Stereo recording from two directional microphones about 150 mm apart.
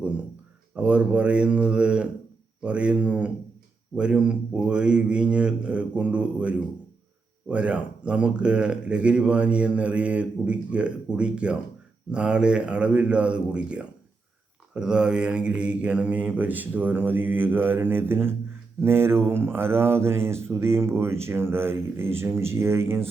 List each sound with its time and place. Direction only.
0.8 s speech: 10° right (ahead or behind)